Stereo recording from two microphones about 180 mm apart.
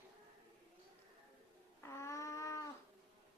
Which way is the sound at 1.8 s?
15° left (ahead or behind).